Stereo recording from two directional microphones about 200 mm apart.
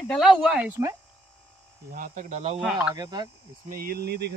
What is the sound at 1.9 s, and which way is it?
Speech, 40° right (ahead or behind).